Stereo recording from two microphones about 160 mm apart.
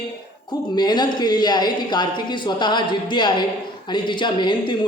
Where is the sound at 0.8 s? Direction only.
25° left (ahead or behind).